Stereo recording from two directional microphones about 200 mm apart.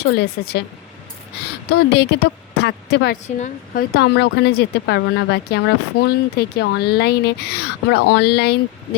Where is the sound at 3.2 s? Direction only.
35° left (ahead or behind).